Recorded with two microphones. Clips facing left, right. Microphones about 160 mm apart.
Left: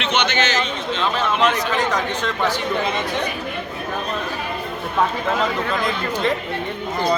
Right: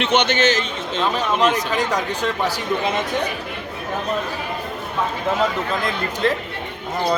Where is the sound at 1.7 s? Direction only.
10° right (ahead or behind).